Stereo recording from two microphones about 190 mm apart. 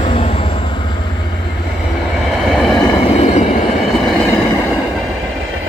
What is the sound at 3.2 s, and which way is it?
Train, 35° left (ahead or behind).